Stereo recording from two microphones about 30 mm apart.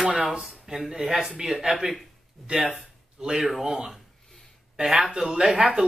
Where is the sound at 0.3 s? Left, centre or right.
Right.